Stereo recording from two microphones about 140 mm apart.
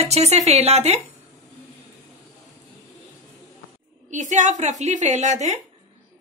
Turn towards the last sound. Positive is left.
turn(degrees=-55)  # may be behind; listen again after turning